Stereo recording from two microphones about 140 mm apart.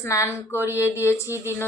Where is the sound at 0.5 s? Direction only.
15° right (ahead or behind).